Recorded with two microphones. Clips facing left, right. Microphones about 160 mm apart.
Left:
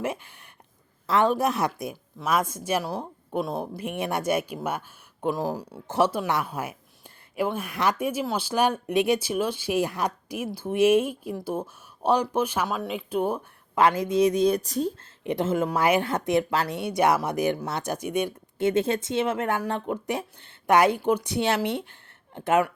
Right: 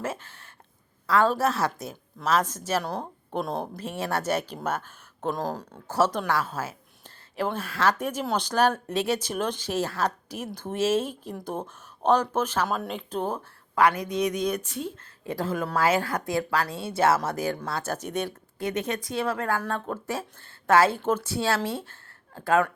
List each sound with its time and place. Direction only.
0.0 s speech: 15° left (ahead or behind)
3.8 s speech: 15° left (ahead or behind)
12.6 s speech: centre (ahead or behind)
13.7 s a woman's voice: 25° left (ahead or behind)
15.2 s speech: 20° left (ahead or behind)
18.6 s speech: 30° left (ahead or behind)